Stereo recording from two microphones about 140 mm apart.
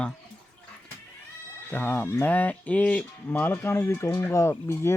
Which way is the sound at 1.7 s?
15° left (ahead or behind).